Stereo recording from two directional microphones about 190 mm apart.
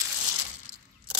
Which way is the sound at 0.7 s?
35° left (ahead or behind).